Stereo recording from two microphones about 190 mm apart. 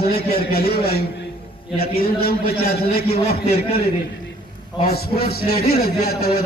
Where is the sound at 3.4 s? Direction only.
35° left (ahead or behind).